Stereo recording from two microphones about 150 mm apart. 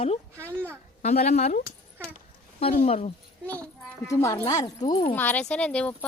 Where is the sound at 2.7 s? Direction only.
45° left (ahead or behind).